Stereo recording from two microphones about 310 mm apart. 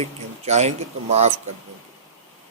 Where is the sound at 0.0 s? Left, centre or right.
Right.